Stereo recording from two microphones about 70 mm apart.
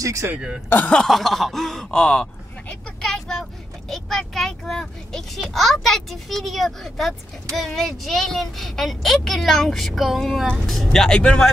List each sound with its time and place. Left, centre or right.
0.0 s speech: right
0.7 s speech: left
0.9 s a child's voice: centre
2.7 s vehicle: centre
3.9 s a child's voice: centre